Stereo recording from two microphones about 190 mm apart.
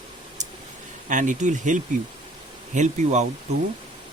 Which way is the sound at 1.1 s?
40° right (ahead or behind).